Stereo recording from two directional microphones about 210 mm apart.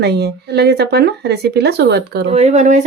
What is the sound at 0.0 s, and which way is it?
Speech, 50° right (ahead or behind).